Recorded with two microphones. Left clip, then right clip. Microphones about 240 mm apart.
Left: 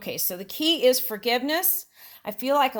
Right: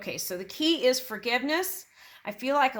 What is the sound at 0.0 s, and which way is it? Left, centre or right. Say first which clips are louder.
Speech: left 2 dB; left.